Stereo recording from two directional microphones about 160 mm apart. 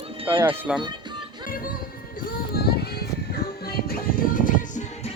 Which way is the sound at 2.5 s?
80° left.